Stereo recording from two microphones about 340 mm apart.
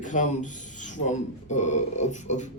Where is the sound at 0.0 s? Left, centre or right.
Left.